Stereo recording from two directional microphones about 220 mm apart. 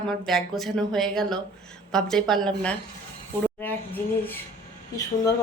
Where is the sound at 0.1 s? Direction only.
Centre (ahead or behind).